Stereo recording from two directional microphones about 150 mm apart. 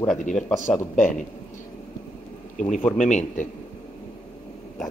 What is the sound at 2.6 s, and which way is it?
Speech, 55° left (ahead or behind).